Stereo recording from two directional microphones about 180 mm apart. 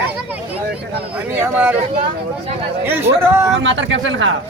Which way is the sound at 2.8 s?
15° right (ahead or behind).